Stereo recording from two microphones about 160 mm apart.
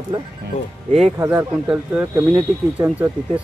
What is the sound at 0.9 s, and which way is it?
Speech, 45° right (ahead or behind).